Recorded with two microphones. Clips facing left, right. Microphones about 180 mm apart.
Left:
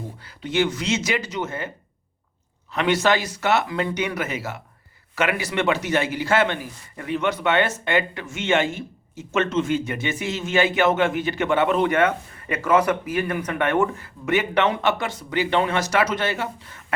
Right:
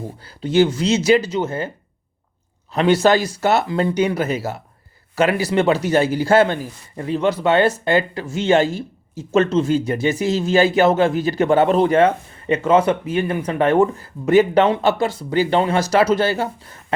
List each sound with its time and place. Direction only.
0.3 s speech: 35° right (ahead or behind)
2.7 s speech: 35° right (ahead or behind)